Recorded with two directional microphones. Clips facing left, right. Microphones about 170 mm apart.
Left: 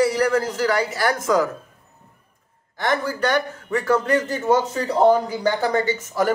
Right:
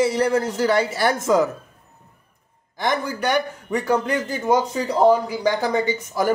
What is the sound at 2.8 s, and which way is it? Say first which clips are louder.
A man's voice: left 1 dB; 15° right (ahead or behind).